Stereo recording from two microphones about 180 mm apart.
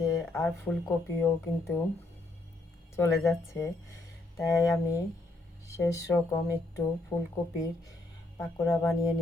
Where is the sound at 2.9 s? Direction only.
15° left (ahead or behind).